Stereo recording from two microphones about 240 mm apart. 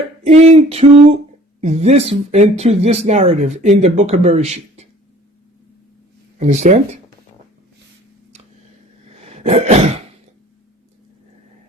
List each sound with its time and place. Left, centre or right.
0.3 s speech: right
6.4 s speech: right
9.0 s cough: right